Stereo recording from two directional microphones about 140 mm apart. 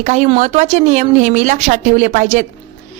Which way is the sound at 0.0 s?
55° right (ahead or behind).